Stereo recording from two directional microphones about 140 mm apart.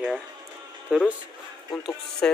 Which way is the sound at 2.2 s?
10° left (ahead or behind).